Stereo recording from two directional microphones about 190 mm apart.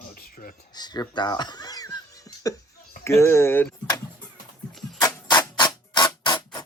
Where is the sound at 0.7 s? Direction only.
20° left (ahead or behind).